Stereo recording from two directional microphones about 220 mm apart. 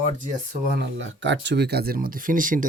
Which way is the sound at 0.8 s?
55° right (ahead or behind).